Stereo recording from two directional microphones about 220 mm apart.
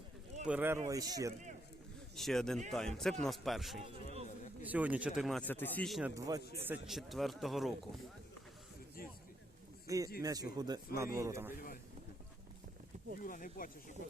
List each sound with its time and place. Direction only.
0.4 s speech: 10° right (ahead or behind)
2.1 s a man's voice: centre (ahead or behind); by 6.4 s 15° right (ahead or behind)
6.4 s a man's voice: 45° left (ahead or behind)
6.7 s a man's voice: centre (ahead or behind)
9.8 s a sound: 15° right (ahead or behind)
10.2 s speech: 15° right (ahead or behind)
11.5 s a sound: 40° left (ahead or behind)
13.2 s speech: 40° left (ahead or behind)